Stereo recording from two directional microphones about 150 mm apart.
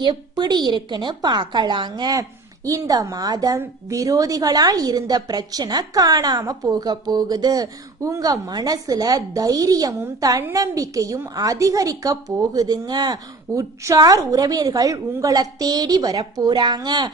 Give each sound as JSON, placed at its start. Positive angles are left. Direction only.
{"t": 0.0, "sound": "a woman's voice", "side_deg": -30}